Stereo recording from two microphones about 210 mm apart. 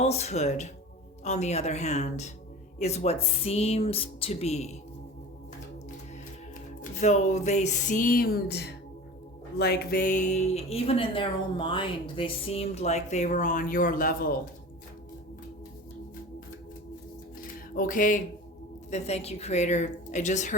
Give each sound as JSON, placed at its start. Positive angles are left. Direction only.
{"t": 0.0, "sound": "speech", "side_deg": 30}
{"t": 6.9, "sound": "speech", "side_deg": 35}
{"t": 17.7, "sound": "speech", "side_deg": 40}